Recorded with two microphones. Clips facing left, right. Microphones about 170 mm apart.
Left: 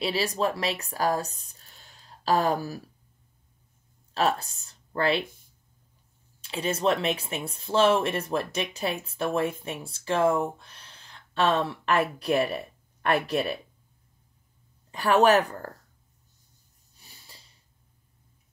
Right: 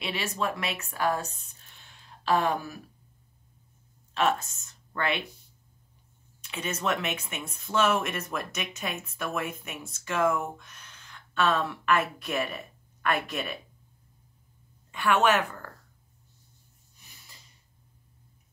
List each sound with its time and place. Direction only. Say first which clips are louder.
0.0 s speech: left 5 dB; 35° left (ahead or behind)
4.1 s speech: left 1 dB; 35° left (ahead or behind)
6.4 s speech: left 5 dB; 30° left (ahead or behind)
14.9 s speech: left 4 dB; 35° left (ahead or behind)
16.9 s snort: left 2 dB; 30° left (ahead or behind)